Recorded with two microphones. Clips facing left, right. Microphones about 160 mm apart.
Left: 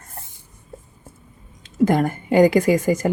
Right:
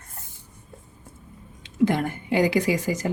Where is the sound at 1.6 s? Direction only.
45° left (ahead or behind).